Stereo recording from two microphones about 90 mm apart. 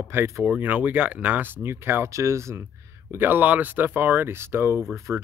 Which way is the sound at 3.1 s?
20° right (ahead or behind).